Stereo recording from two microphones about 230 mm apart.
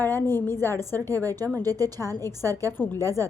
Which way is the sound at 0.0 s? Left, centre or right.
Centre.